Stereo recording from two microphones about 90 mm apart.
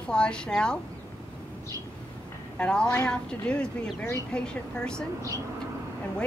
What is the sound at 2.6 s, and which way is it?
A woman's voice, 10° left (ahead or behind).